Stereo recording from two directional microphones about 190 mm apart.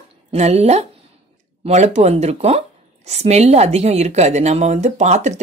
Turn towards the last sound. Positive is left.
turn(degrees=-40)  # may be behind; listen again after turning